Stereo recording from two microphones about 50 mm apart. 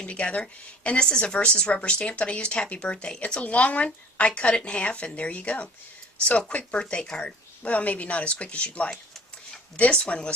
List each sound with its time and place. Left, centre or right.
0.0 s speech: left